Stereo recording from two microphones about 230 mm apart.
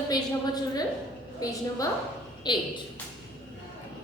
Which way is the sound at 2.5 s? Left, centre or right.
Centre.